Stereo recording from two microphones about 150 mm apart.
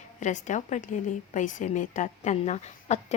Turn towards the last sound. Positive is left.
turn(degrees=50)  # may be behind; listen again after turning